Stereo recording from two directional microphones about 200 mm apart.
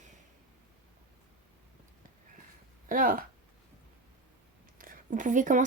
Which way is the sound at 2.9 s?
45° right (ahead or behind).